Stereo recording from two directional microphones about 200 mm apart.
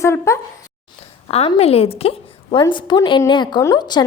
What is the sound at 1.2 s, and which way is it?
A woman's voice, 30° left (ahead or behind).